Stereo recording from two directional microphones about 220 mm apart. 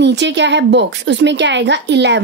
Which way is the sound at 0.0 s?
55° right (ahead or behind).